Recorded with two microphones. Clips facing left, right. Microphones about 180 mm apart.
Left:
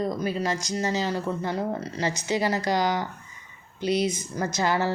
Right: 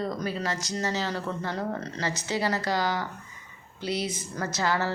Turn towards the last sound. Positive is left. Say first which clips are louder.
# left 3 dB
turn(degrees=15)  # may be behind; listen again after turning